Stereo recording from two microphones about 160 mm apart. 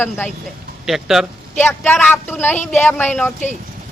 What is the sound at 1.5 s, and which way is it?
A man's voice, 15° left (ahead or behind).